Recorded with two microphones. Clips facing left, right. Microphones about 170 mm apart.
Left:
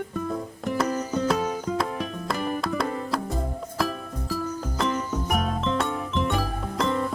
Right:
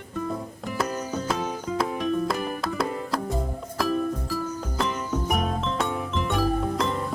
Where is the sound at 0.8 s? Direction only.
Centre (ahead or behind).